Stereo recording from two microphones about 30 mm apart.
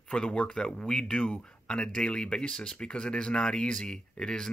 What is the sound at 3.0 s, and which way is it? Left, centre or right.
Speech, left.